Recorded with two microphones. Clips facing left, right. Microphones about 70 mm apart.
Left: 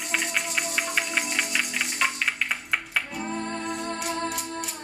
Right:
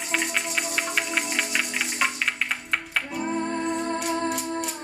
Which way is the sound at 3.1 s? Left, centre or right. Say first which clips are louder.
Right 4 dB; centre.